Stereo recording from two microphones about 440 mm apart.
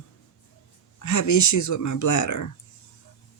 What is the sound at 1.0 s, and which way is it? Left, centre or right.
Speech, left.